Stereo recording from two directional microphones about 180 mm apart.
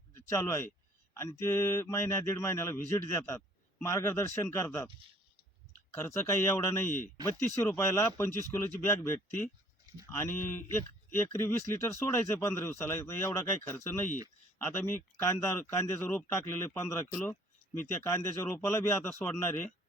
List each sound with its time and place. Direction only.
0.3 s speech: 15° left (ahead or behind)
5.9 s speech: 15° left (ahead or behind)